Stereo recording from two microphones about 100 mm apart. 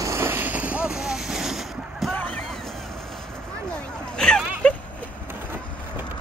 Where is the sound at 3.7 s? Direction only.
5° left (ahead or behind).